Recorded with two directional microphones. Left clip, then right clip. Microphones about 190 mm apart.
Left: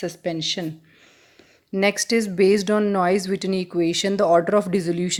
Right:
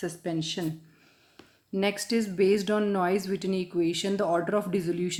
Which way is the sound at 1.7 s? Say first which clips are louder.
Left 8 dB; 40° left (ahead or behind).